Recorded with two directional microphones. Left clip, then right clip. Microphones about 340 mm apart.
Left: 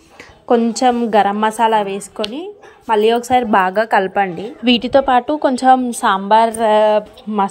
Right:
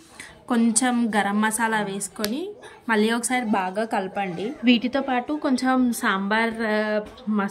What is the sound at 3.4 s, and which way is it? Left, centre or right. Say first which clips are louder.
Speech: left 11 dB; left.